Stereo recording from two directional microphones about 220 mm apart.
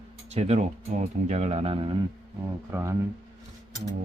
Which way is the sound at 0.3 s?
30° right (ahead or behind).